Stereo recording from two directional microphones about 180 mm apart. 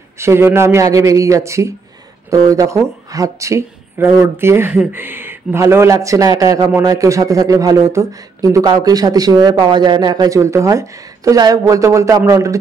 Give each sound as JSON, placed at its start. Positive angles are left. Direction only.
{"t": 0.2, "sound": "speech", "side_deg": -15}